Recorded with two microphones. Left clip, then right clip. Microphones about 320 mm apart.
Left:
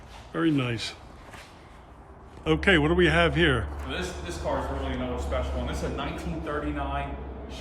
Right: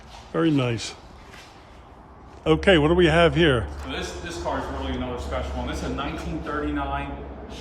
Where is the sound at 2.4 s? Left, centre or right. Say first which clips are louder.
Right 4 dB; centre.